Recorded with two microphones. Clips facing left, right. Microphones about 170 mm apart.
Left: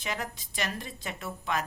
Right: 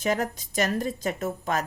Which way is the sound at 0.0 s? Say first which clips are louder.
Right 9 dB; 45° right (ahead or behind).